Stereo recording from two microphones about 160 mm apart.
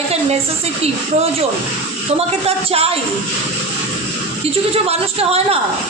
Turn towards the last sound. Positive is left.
turn(degrees=-40)  # may be behind; listen again after turning